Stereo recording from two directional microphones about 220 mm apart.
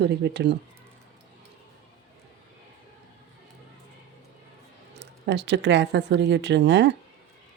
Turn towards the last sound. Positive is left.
turn(degrees=-50)  # may be behind; listen again after turning